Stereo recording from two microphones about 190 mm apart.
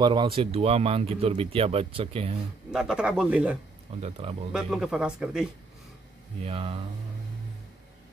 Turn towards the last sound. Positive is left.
turn(degrees=-30)  # may be behind; listen again after turning